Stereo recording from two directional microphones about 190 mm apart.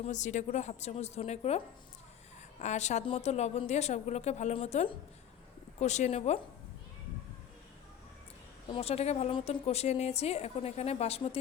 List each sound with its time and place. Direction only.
0.0 s a woman's voice: 40° left (ahead or behind)
8.7 s a woman's voice: 30° left (ahead or behind)